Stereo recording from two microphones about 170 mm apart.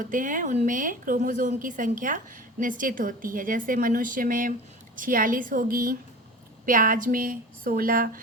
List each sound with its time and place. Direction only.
0.0 s a woman's voice: 50° right (ahead or behind)